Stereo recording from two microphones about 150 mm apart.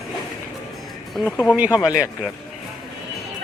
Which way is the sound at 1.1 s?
Centre (ahead or behind).